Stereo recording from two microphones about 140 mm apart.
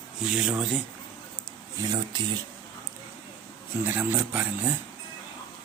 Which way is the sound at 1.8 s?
30° right (ahead or behind).